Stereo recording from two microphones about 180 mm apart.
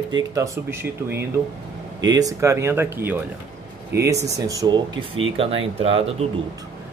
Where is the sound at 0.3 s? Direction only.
15° right (ahead or behind); by 6.0 s 35° right (ahead or behind).